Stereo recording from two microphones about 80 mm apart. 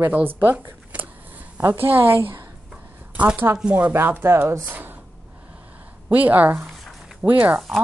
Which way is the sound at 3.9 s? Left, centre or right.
Right.